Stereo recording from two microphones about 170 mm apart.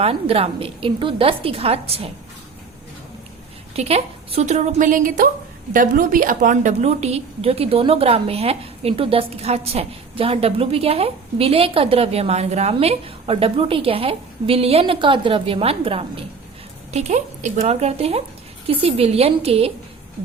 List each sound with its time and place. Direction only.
0.0 s a woman's voice: 35° right (ahead or behind)
3.8 s a woman's voice: 35° right (ahead or behind)